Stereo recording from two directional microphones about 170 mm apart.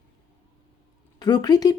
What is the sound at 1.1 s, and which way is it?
Speech, 25° left (ahead or behind).